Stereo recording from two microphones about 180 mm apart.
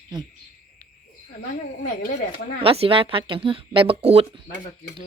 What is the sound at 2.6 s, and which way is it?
Speech, 30° right (ahead or behind).